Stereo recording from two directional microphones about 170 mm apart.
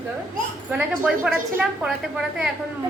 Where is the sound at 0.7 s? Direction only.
5° right (ahead or behind).